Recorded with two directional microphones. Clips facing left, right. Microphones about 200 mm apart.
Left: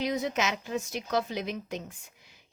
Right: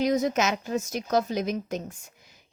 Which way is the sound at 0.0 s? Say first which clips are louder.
Right 5 dB; 45° right (ahead or behind).